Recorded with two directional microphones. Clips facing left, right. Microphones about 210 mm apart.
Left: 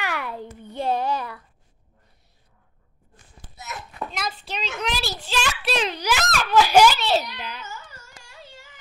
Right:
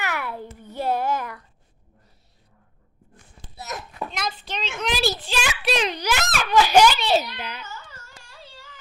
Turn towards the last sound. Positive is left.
turn(degrees=-10)  # may be behind; listen again after turning